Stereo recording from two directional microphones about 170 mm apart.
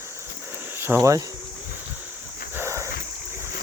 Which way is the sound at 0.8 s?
15° right (ahead or behind).